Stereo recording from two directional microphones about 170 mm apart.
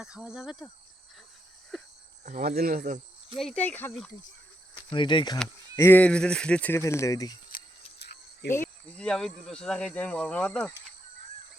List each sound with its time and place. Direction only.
0.0 s speech: 5° right (ahead or behind)
2.2 s speech: 45° right (ahead or behind)
2.6 s speech: 60° right (ahead or behind)
3.3 s speech: 5° left (ahead or behind)
4.9 s speech: 30° left (ahead or behind)
5.7 s speech: 15° left (ahead or behind)
7.9 s cricket: 75° left (ahead or behind)
8.5 s speech: 10° left (ahead or behind)